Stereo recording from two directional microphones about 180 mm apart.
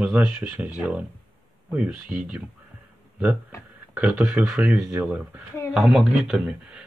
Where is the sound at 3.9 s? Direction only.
5° right (ahead or behind).